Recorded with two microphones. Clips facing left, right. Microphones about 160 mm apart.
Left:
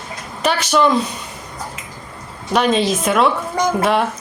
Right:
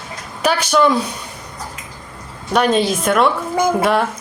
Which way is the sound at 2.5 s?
Centre (ahead or behind).